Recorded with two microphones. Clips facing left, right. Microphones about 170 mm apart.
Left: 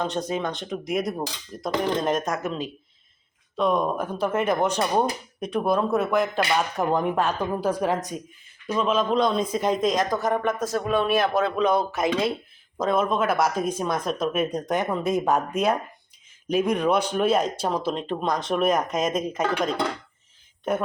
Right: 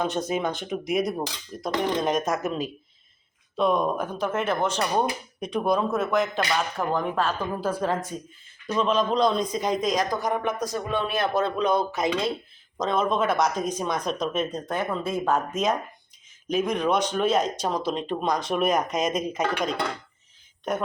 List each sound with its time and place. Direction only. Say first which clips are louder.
0.0 s speech: right 1 dB; 10° right (ahead or behind)
6.5 s speech: left 3 dB; 20° left (ahead or behind)
8.6 s speech: even; 5° left (ahead or behind)
14.5 s speech: left 3 dB; 20° left (ahead or behind)